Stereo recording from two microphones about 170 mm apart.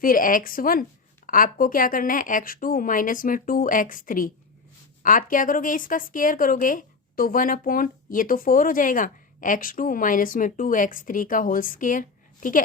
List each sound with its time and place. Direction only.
0.0 s a woman's voice: 55° left (ahead or behind)